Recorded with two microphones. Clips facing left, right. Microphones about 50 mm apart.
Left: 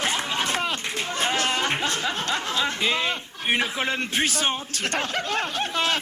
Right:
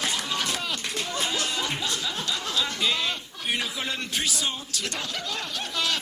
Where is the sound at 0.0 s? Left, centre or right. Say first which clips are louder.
Left 3 dB; left.